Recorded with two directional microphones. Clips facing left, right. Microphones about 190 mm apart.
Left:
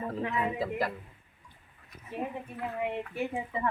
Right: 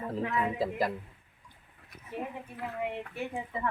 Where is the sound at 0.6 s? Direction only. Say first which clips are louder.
Right 1 dB; 10° right (ahead or behind).